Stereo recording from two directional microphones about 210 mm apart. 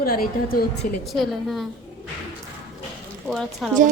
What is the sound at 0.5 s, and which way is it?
Speech, 45° left (ahead or behind).